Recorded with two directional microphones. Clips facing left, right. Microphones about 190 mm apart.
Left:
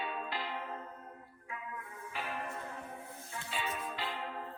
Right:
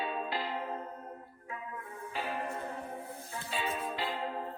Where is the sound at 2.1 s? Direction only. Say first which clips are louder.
Right 4 dB; 35° right (ahead or behind).